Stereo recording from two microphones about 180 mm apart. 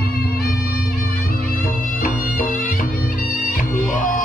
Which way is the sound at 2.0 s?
55° left (ahead or behind).